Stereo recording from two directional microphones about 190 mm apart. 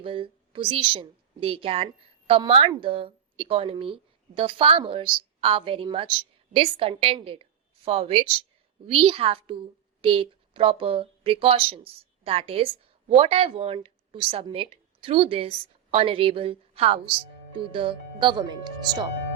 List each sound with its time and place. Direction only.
0.0 s a woman's voice: 30° right (ahead or behind)